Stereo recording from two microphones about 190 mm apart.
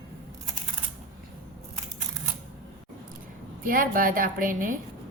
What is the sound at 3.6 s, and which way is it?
A woman's voice, 45° right (ahead or behind).